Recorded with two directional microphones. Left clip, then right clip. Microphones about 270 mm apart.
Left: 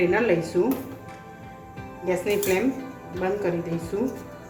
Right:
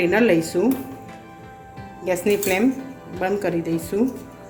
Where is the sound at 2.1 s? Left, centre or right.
Right.